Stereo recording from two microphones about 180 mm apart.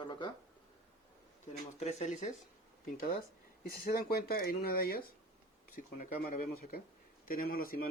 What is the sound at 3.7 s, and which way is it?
Speech, 55° left (ahead or behind).